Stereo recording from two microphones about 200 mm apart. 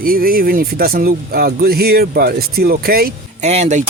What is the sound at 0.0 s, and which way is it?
Speech, 45° right (ahead or behind).